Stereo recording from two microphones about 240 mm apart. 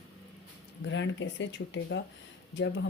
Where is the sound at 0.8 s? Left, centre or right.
Left.